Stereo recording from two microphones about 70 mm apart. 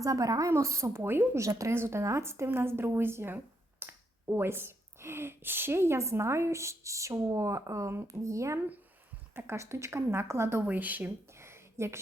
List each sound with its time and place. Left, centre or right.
0.0 s a woman's voice: right
0.5 s speech: right
1.4 s a woman's voice: right
1.7 s speech: right
9.3 s speech: right
10.7 s speech: right
11.3 s a sound: right